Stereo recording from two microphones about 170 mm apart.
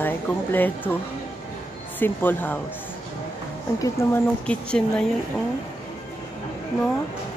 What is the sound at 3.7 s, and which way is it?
Speech, 20° left (ahead or behind).